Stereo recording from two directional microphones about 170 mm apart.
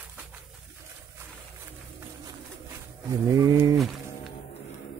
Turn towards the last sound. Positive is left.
turn(degrees=-20)  # may be behind; listen again after turning